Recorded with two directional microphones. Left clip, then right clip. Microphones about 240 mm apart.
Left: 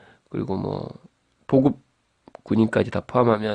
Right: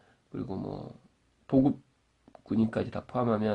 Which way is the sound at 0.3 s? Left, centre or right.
Left.